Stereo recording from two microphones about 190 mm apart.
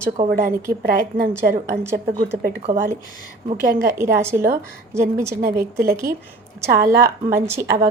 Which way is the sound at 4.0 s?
15° right (ahead or behind).